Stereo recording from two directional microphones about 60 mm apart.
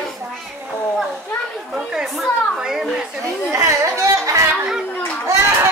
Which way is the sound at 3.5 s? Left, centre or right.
Right.